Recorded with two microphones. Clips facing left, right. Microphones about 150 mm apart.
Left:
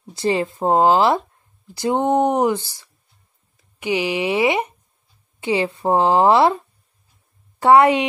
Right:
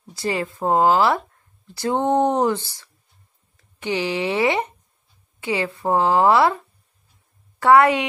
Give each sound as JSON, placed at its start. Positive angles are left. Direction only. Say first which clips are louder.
{"t": 0.0, "sound": "a woman's voice", "louder": "left 5 dB", "side_deg": 25}